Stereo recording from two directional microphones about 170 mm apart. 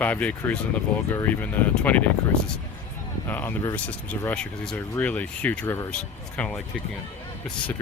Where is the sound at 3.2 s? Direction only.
10° left (ahead or behind).